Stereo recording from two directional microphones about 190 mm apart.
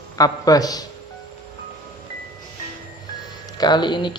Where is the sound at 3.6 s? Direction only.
25° left (ahead or behind).